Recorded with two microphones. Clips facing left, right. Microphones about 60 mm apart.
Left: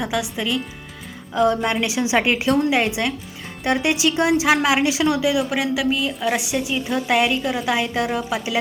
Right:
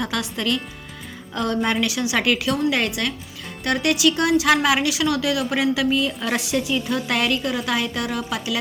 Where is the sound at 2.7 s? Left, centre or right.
Centre.